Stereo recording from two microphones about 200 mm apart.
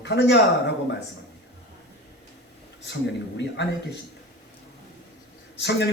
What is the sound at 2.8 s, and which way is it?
Speech, 60° left (ahead or behind).